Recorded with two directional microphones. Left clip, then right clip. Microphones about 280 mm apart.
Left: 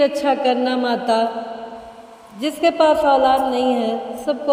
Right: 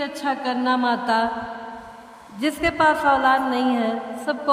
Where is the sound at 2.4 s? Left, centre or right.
Centre.